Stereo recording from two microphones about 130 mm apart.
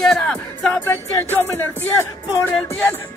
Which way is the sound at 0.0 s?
5° left (ahead or behind).